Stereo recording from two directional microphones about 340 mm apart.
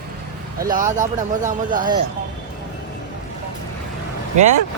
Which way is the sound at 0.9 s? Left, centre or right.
Right.